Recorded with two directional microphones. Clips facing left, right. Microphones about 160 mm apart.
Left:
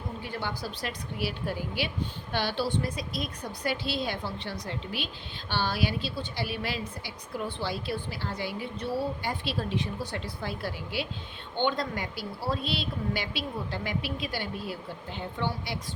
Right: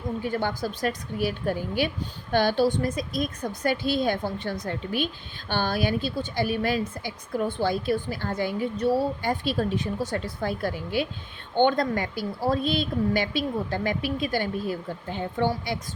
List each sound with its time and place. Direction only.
0.2 s a woman's voice: 50° right (ahead or behind)